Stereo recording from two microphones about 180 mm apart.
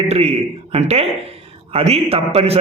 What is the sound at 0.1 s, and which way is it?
A man's voice, 35° right (ahead or behind).